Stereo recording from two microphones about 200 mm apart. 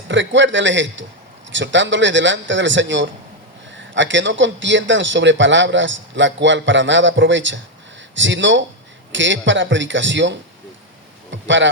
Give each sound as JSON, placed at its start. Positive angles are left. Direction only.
{"t": 0.1, "sound": "speech", "side_deg": -65}